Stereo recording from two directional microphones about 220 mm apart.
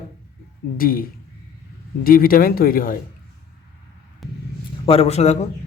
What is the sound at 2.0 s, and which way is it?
Speech, 40° left (ahead or behind).